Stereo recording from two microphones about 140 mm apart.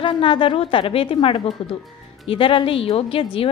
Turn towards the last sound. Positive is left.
turn(degrees=40)  # may be behind; listen again after turning